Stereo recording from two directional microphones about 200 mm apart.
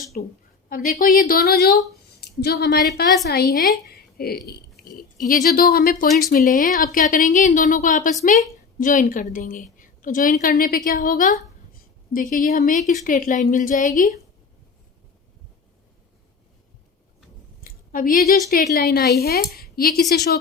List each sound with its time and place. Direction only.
0.7 s a woman's voice: 45° left (ahead or behind)
17.6 s a sound: 45° left (ahead or behind)
18.5 s speech: 50° left (ahead or behind)